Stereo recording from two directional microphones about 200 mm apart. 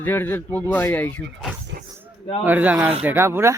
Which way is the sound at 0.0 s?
10° left (ahead or behind).